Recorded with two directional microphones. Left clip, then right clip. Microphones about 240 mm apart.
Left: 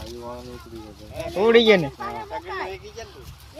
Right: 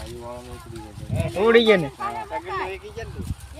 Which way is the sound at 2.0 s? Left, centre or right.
Right.